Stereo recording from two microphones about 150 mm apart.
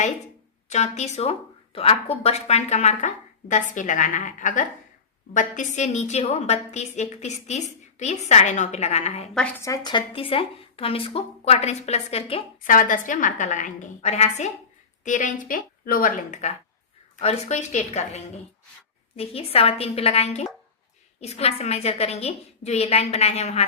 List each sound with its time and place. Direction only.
0.7 s a woman's voice: 50° left (ahead or behind)
9.6 s speech: 20° left (ahead or behind); by 12.4 s 45° left (ahead or behind)
12.6 s a woman's voice: 60° left (ahead or behind)
17.2 s a woman's voice: 45° left (ahead or behind)